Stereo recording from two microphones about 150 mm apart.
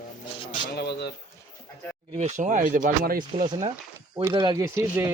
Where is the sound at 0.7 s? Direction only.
90° left.